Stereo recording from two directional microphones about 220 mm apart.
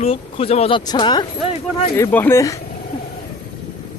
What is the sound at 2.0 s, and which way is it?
Speech, 10° left (ahead or behind).